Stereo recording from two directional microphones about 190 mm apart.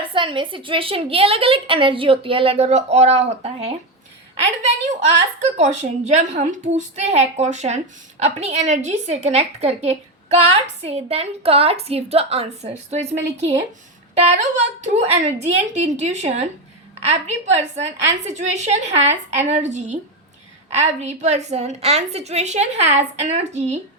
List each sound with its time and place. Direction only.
0.0 s a woman's voice: 25° right (ahead or behind)